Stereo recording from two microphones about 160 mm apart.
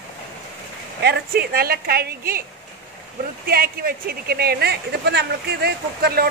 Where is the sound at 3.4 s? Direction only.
70° right (ahead or behind).